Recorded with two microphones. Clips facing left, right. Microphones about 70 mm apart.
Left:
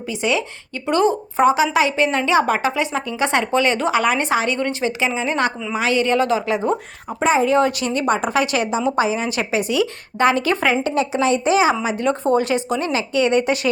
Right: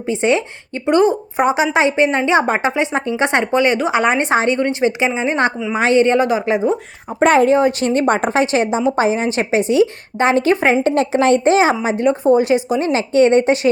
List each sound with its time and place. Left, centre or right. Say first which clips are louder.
0.1 s a woman's voice: right 5 dB; right
0.9 s a woman's voice: right 4 dB; right
7.2 s a woman's voice: right 5 dB; right
7.8 s a woman's voice: right 4 dB; right
8.4 s a woman's voice: right 4 dB; right
10.8 s a woman's voice: right 5 dB; right
12.0 s a woman's voice: right 5 dB; centre
12.9 s a woman's voice: right 6 dB; right